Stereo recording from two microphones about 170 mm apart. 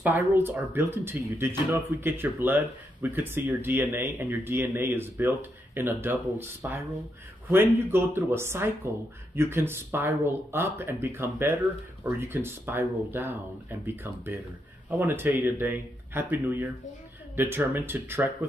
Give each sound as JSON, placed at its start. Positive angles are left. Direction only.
{"t": 0.0, "sound": "speech", "side_deg": -10}